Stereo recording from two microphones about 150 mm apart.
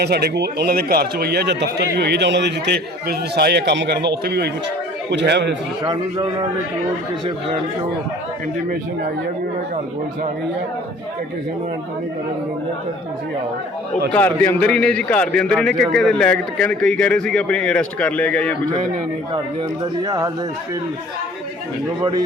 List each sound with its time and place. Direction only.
0.0 s a man's voice: 90° right
5.8 s a man's voice: 25° right (ahead or behind)
14.1 s speech: 10° left (ahead or behind)
20.1 s a man's voice: 25° right (ahead or behind)